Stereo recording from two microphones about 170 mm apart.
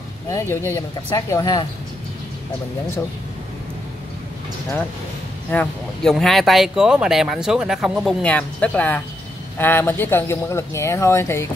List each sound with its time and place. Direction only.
0.3 s speech: 15° left (ahead or behind)
5.5 s speech: 5° left (ahead or behind)